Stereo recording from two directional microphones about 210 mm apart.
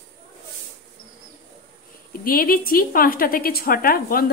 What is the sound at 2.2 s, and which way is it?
A woman's voice, 45° left (ahead or behind).